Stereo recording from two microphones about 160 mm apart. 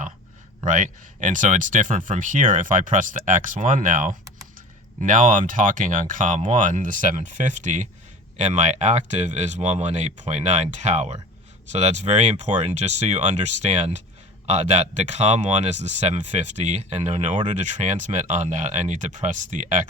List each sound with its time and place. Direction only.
0.6 s speech: 55° right (ahead or behind)